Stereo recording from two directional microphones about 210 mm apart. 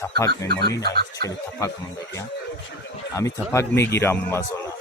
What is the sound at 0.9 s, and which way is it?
Speech, 50° right (ahead or behind).